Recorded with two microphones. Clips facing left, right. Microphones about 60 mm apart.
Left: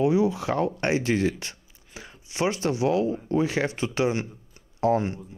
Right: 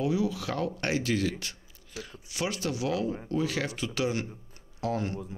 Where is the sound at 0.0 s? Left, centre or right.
Left.